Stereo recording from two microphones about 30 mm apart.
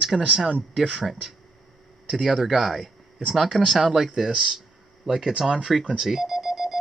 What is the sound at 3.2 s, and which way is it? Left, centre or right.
Speech, centre.